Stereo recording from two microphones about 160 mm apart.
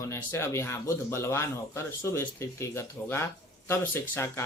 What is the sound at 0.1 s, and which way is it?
Speech, 15° left (ahead or behind).